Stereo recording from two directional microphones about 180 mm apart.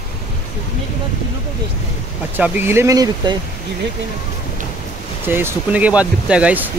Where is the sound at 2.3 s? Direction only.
10° right (ahead or behind).